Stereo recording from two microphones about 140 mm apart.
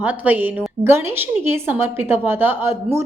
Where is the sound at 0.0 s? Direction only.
10° right (ahead or behind).